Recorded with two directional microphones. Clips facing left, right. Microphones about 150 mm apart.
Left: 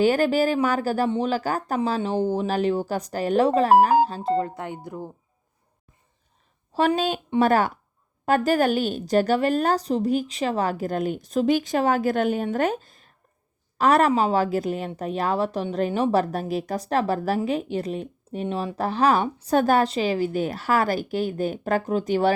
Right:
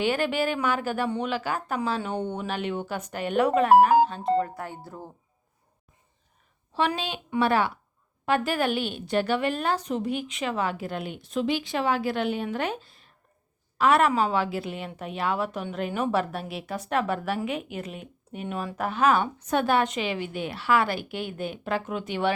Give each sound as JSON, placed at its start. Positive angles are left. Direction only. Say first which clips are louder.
{"t": 0.0, "sound": "a woman's voice", "louder": "left 6 dB", "side_deg": 40}
{"t": 6.7, "sound": "a woman's voice", "louder": "left 6 dB", "side_deg": 45}